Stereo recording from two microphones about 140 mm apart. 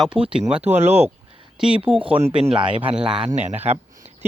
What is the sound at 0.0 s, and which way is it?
Speech, 5° right (ahead or behind).